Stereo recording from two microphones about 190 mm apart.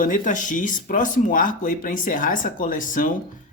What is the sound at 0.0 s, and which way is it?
Speech, 45° left (ahead or behind).